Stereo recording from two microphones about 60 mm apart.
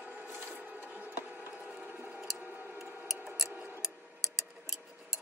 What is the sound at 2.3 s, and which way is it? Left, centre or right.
Tick-tock, right.